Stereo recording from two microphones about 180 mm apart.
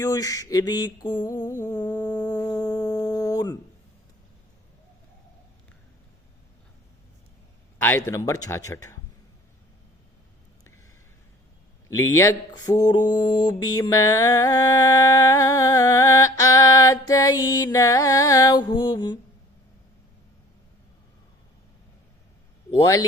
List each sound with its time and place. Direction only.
0.0 s mantra: 20° left (ahead or behind)
1.5 s humming: 45° left (ahead or behind)
2.0 s a sound: 20° left (ahead or behind)
7.8 s speech: 10° left (ahead or behind)
11.9 s speech: 15° left (ahead or behind)